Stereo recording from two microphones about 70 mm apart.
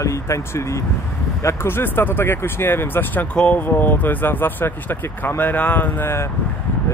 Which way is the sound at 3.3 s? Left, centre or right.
Centre.